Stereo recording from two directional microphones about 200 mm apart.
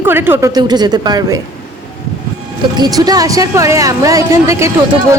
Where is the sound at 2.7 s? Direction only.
20° right (ahead or behind).